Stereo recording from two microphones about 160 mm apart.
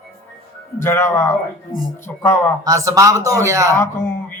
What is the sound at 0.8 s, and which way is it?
A man's voice, 15° left (ahead or behind).